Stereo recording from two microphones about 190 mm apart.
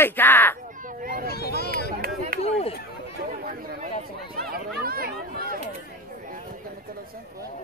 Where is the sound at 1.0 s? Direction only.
50° right (ahead or behind).